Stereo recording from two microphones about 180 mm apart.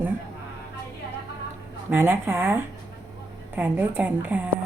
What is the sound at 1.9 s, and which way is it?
Speech, 10° right (ahead or behind).